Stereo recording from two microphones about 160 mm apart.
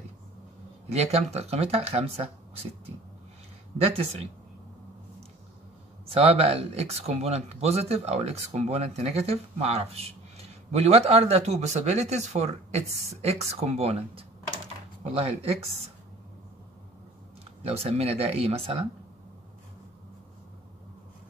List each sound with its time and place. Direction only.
0.8 s speech: 40° right (ahead or behind)
3.7 s speech: 40° right (ahead or behind)
6.0 s speech: 40° right (ahead or behind)
17.6 s speech: 40° right (ahead or behind)